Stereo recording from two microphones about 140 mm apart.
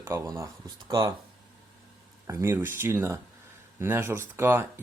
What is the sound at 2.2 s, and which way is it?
Speech, 20° right (ahead or behind).